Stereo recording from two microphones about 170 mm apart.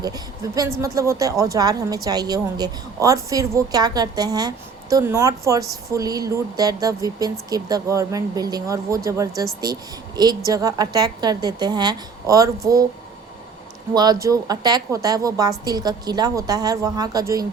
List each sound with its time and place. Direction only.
0.0 s speech: 20° right (ahead or behind)
13.9 s speech: 25° right (ahead or behind)